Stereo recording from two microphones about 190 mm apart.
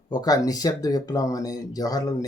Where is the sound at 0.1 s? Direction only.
20° left (ahead or behind).